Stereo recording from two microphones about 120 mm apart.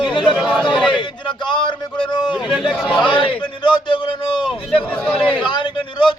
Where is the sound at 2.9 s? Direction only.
40° left (ahead or behind).